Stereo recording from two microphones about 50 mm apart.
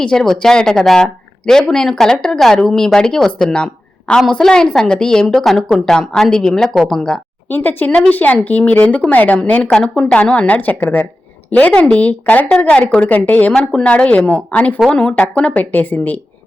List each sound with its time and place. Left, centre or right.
0.0 s speech: centre
5.3 s a woman's voice: centre
5.8 s speech: centre
7.5 s speech: left
7.9 s speech: left
8.1 s a woman's voice: left
9.6 s a woman's voice: centre; by 13.5 s left
13.6 s speech: centre
13.9 s speech: left